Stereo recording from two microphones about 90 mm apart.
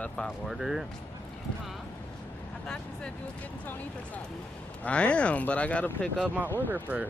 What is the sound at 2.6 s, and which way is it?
Vehicle, 10° left (ahead or behind).